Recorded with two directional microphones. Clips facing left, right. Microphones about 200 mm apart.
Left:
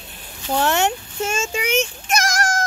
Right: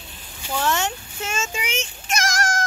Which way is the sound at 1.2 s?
50° left (ahead or behind).